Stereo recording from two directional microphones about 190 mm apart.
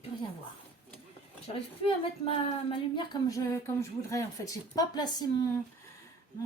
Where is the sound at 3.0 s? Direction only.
15° left (ahead or behind).